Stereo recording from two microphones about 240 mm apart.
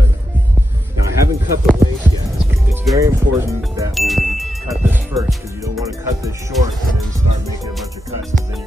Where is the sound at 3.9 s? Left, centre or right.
Centre.